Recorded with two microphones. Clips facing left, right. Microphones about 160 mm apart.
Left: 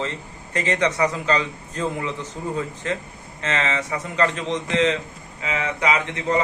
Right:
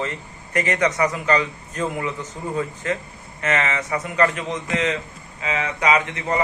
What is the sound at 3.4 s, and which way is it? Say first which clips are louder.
A man's voice: right 2 dB; 25° left (ahead or behind).